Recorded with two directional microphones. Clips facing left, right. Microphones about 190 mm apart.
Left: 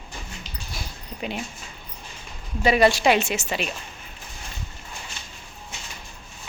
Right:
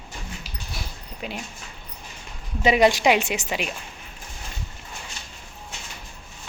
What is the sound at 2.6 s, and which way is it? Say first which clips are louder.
A woman's voice: even; 20° right (ahead or behind).